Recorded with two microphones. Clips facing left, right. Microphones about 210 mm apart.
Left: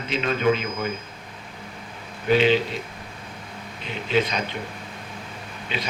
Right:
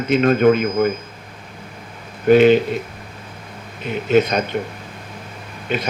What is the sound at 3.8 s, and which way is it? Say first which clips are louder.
Speech: right 8 dB; 50° right (ahead or behind).